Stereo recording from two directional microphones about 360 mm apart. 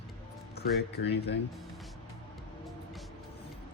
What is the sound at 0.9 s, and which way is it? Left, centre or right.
Speech, left.